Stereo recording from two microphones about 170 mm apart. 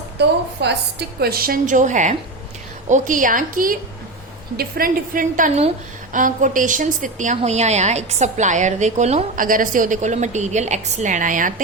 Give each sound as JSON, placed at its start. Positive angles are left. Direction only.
{"t": 0.6, "sound": "a woman's voice", "side_deg": -80}